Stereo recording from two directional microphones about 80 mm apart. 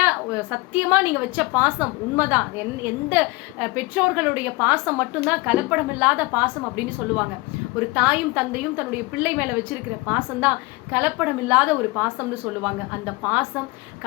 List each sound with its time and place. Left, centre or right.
0.0 s a woman's voice: right